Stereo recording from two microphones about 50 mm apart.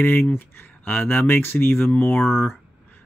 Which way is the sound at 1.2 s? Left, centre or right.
Left.